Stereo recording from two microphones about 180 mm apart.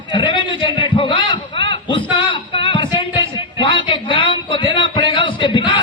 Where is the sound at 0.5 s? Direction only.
25° left (ahead or behind).